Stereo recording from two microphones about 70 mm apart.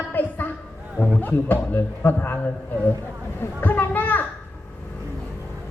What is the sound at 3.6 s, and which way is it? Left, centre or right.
Children playing, left.